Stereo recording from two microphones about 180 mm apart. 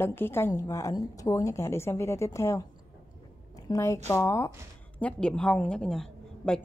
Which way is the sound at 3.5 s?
15° left (ahead or behind).